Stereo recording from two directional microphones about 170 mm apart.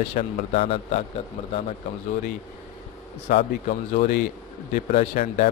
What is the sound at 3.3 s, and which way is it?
Speech, 55° left (ahead or behind).